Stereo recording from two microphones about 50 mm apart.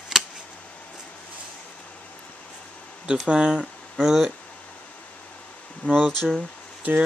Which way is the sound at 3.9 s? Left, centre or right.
Centre.